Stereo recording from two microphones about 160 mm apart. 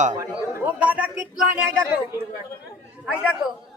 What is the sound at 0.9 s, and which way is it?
A woman's voice, 10° right (ahead or behind).